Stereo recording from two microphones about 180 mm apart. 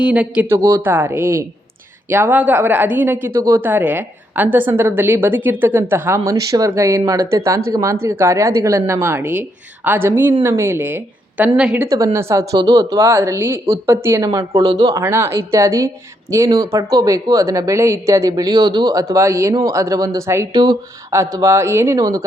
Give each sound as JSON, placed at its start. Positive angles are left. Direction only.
{"t": 0.0, "sound": "speech", "side_deg": -5}
{"t": 11.9, "sound": "speech", "side_deg": -20}
{"t": 15.0, "sound": "speech", "side_deg": -15}